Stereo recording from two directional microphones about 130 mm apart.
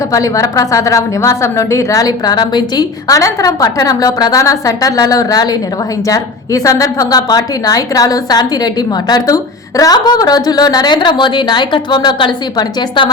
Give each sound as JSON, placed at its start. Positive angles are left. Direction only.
{"t": 0.1, "sound": "a woman's voice", "side_deg": 25}